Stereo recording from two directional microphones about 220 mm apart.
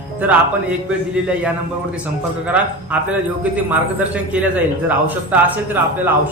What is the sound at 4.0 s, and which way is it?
A man's voice, 5° right (ahead or behind).